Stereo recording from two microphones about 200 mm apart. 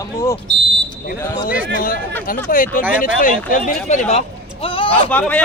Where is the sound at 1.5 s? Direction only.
45° left (ahead or behind).